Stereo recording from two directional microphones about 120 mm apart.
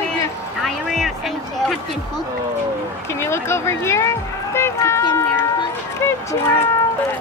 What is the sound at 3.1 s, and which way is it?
Speech, 20° left (ahead or behind).